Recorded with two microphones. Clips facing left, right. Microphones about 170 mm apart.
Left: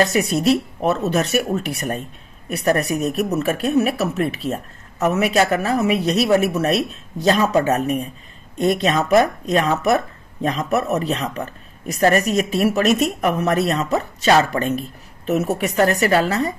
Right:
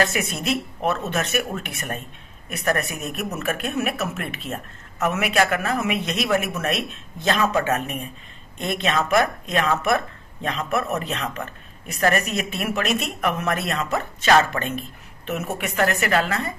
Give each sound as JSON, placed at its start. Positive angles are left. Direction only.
{"t": 0.1, "sound": "speech", "side_deg": 35}